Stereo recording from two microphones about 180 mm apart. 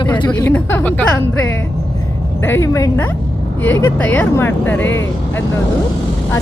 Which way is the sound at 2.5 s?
15° left (ahead or behind).